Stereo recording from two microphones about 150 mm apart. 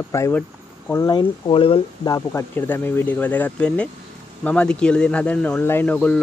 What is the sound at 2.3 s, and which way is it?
Speech, 15° left (ahead or behind).